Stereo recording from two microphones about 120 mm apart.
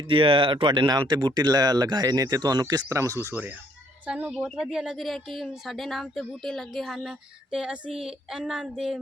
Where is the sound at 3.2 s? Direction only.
15° right (ahead or behind).